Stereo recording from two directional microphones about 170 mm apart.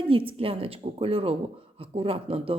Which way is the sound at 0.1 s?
30° right (ahead or behind).